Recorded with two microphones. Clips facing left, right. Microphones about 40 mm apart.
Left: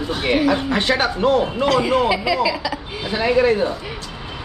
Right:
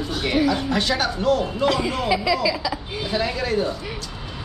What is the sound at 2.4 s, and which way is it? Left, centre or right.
Speech, left.